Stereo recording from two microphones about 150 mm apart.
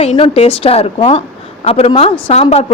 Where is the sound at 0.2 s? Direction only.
40° left (ahead or behind).